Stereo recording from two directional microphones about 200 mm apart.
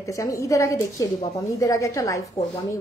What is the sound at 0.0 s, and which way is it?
A woman's voice, 15° left (ahead or behind).